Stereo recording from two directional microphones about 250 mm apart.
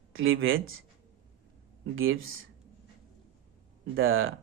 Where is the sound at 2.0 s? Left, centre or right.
Right.